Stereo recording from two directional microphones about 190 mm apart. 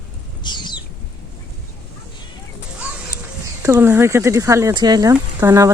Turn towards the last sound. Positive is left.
turn(degrees=-15)  # may be behind; listen again after turning